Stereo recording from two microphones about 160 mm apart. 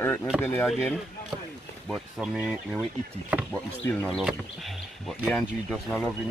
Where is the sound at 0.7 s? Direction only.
Centre (ahead or behind).